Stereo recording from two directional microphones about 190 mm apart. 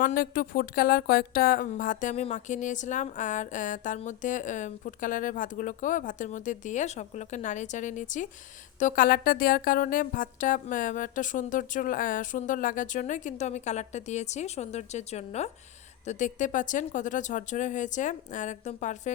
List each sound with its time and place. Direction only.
0.0 s speech: 45° left (ahead or behind)